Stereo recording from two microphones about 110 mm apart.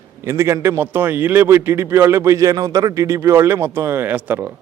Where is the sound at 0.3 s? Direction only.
25° right (ahead or behind).